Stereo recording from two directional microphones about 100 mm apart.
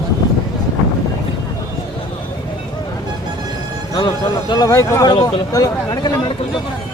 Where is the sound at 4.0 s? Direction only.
50° left (ahead or behind); by 5.1 s 30° left (ahead or behind).